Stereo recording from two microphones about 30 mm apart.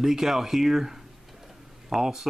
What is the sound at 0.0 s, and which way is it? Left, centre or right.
Speech, centre.